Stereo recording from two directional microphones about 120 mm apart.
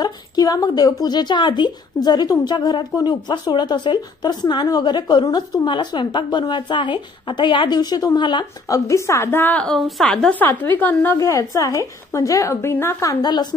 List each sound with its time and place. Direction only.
0.0 s a woman's voice: 30° left (ahead or behind); by 11.1 s 15° left (ahead or behind)
11.1 s a woman's voice: 25° left (ahead or behind)
13.2 s a woman's voice: 35° left (ahead or behind)